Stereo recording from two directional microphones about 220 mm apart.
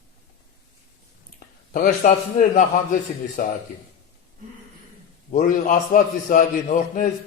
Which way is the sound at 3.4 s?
40° left (ahead or behind).